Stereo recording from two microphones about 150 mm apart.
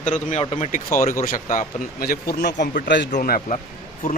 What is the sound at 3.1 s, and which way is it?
Speech, 70° left (ahead or behind).